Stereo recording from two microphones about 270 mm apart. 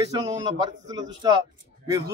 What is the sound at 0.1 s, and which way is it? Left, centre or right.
A man's voice, centre.